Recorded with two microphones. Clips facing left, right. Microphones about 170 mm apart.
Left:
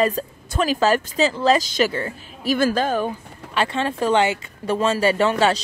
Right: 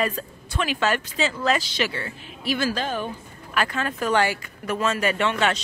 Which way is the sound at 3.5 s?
30° left (ahead or behind).